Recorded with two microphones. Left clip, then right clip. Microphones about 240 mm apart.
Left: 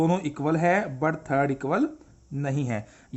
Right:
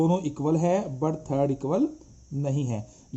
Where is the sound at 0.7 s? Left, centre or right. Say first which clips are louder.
Left 2 dB; centre.